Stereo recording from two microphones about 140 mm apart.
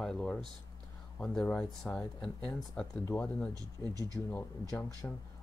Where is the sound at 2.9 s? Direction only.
15° left (ahead or behind).